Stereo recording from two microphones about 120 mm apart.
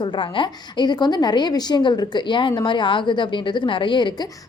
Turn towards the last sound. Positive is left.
turn(degrees=40)  # may be behind; listen again after turning